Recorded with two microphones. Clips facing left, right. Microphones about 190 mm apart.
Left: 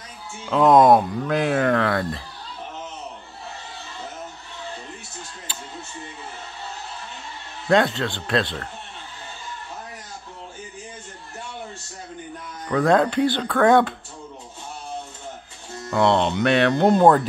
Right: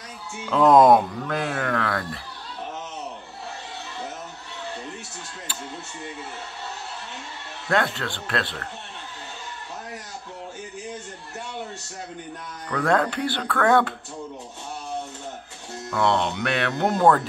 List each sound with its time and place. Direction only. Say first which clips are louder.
0.5 s speech: left 1 dB; centre (ahead or behind)
1.2 s speech: left 6 dB; 20° left (ahead or behind)
7.7 s speech: left 5 dB; 20° left (ahead or behind)
12.6 s speech: left 4 dB; 20° left (ahead or behind)
15.9 s speech: left 4 dB; 20° left (ahead or behind)